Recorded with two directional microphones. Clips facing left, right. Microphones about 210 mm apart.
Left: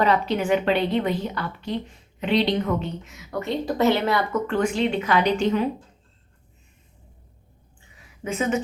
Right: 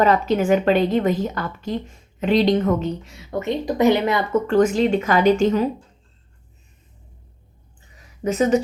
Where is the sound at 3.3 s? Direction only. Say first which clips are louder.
Right 3 dB; 15° right (ahead or behind).